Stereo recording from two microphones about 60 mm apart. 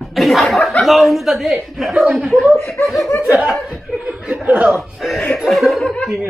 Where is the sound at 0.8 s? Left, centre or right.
Centre.